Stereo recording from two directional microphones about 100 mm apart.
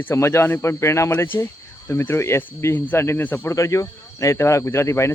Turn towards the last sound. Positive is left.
turn(degrees=25)  # may be behind; listen again after turning